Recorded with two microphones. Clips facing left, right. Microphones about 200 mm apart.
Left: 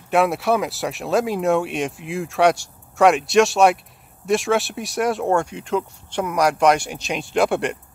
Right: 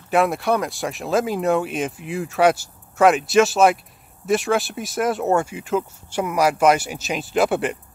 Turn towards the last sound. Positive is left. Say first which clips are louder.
# even
turn(degrees=-5)  # may be behind; listen again after turning